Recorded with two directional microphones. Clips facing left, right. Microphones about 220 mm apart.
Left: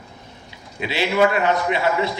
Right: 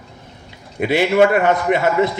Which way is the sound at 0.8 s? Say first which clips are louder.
Right 5 dB; 50° right (ahead or behind).